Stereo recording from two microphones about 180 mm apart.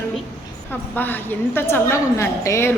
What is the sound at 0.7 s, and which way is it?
Speech, 10° left (ahead or behind).